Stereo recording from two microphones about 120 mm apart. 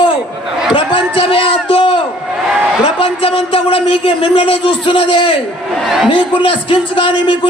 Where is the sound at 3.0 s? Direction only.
50° left (ahead or behind).